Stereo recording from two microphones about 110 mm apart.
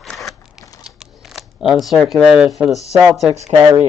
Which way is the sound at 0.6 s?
35° left (ahead or behind).